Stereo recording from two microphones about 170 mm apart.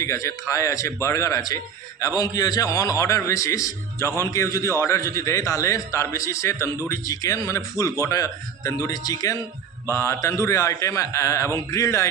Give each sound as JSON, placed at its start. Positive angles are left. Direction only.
{"t": 0.0, "sound": "a man's voice", "side_deg": 20}